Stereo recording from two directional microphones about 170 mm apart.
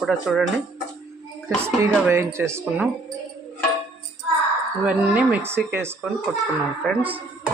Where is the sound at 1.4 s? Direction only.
15° right (ahead or behind).